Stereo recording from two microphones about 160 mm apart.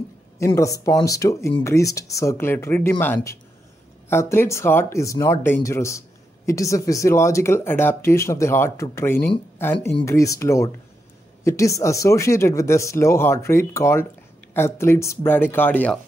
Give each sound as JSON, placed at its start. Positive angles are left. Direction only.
{"t": 0.6, "sound": "speech", "side_deg": 20}